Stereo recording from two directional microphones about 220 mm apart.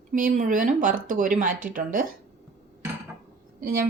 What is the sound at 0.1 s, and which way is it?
Speech, 35° right (ahead or behind).